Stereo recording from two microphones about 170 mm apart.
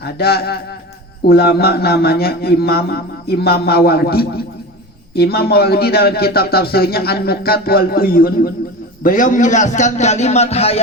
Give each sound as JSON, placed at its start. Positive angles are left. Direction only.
{"t": 0.0, "sound": "a man's voice", "side_deg": 65}